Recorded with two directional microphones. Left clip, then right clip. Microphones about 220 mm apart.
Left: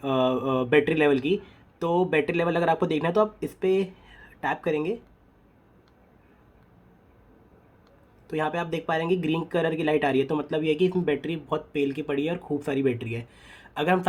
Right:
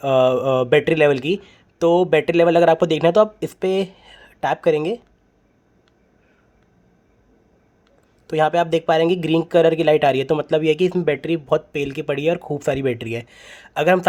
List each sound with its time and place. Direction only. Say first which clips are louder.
0.0 s speech: right 9 dB; 50° right (ahead or behind)
8.3 s speech: right 11 dB; 50° right (ahead or behind)